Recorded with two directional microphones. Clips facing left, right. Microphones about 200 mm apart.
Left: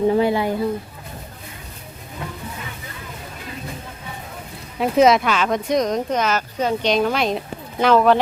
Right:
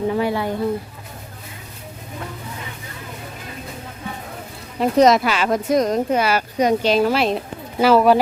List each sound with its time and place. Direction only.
0.1 s speech: 25° left (ahead or behind)
4.8 s speech: centre (ahead or behind)